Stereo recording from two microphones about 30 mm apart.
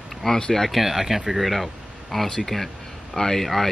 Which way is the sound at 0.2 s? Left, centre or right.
Centre.